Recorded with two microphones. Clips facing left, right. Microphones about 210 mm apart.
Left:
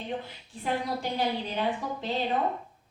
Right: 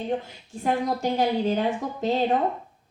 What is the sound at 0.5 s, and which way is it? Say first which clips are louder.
A woman's voice: right 5 dB; 45° right (ahead or behind).